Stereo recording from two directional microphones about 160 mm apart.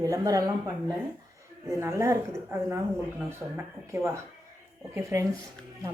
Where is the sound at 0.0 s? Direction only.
20° right (ahead or behind).